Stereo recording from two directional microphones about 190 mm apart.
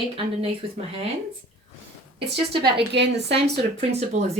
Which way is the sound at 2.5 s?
25° right (ahead or behind).